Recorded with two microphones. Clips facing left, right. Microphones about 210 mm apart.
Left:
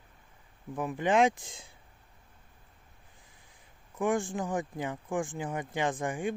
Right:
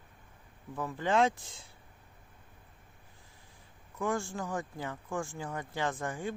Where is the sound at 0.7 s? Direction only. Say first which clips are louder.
Left 3 dB; 15° left (ahead or behind).